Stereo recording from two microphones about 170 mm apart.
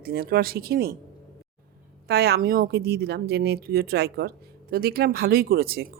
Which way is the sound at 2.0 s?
70° right (ahead or behind).